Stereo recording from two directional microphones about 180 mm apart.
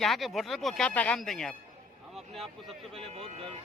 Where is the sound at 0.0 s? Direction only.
Centre (ahead or behind).